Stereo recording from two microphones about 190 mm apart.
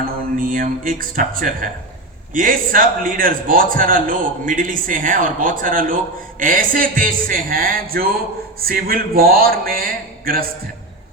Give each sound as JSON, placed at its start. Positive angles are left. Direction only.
{"t": 0.3, "sound": "a man's voice", "side_deg": -50}